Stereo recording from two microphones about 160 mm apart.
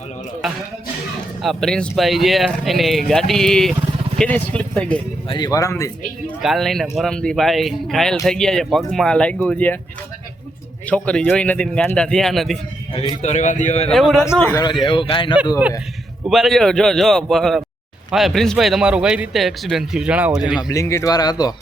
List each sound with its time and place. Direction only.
1.4 s speech: centre (ahead or behind)
5.3 s speech: 25° left (ahead or behind)
6.4 s speech: centre (ahead or behind)
10.8 s speech: 5° left (ahead or behind)
13.2 s a man's voice: 50° left (ahead or behind)
13.9 s speech: centre (ahead or behind)
14.5 s speech: 25° left (ahead or behind)
16.2 s speech: centre (ahead or behind)
20.6 s speech: 20° left (ahead or behind)